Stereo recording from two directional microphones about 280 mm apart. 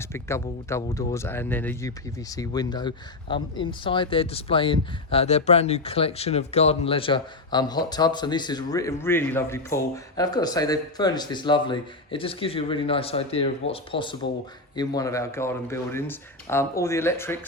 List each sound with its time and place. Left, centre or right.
0.0 s speech: centre